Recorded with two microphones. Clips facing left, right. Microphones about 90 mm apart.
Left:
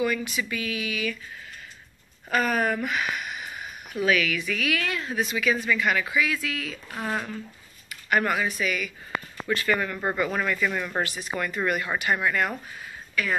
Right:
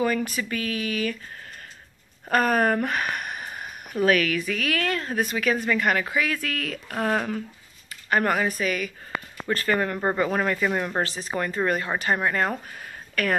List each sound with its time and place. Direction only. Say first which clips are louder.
0.0 s speech: right 2 dB; 40° right (ahead or behind)
2.2 s speech: right 3 dB; 45° right (ahead or behind); by 7.4 s 65° right (ahead or behind)
7.9 s speech: right 1 dB; 35° right (ahead or behind)
9.9 s speech: right 3 dB; 30° right (ahead or behind)
12.8 s a sound: right 3 dB; 55° right (ahead or behind)